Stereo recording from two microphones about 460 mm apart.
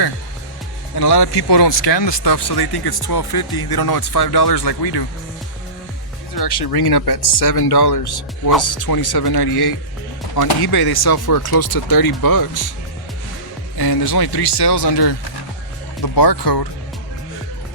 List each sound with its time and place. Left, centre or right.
0.9 s speech: left
6.3 s speech: left
13.7 s speech: left
16.1 s speech: left